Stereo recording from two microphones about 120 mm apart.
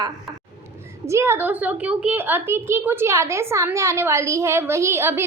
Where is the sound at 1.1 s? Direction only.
20° right (ahead or behind).